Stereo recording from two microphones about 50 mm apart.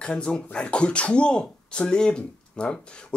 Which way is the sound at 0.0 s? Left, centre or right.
Centre.